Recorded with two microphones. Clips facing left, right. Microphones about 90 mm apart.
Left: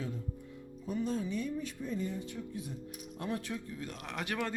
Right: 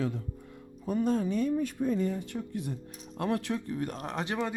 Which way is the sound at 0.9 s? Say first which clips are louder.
Right 7 dB; 50° right (ahead or behind).